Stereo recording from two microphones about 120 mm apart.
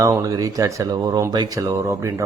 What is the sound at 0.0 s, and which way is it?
Speech, 30° right (ahead or behind).